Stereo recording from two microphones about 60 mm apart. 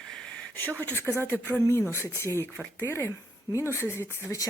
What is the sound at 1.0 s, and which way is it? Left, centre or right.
Speech, left.